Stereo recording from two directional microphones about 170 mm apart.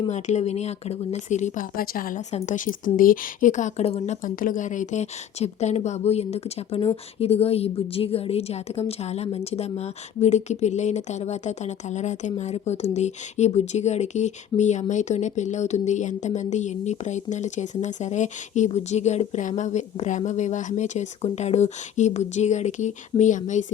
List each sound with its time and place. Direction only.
0.1 s a woman's voice: 45° left (ahead or behind)